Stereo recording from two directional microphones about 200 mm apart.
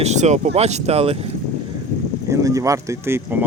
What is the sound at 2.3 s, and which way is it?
Speech, 15° right (ahead or behind).